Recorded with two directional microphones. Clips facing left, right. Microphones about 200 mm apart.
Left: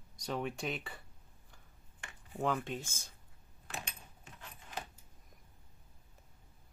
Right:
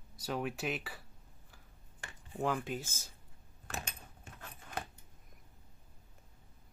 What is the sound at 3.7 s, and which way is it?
Keys jangling, 45° right (ahead or behind).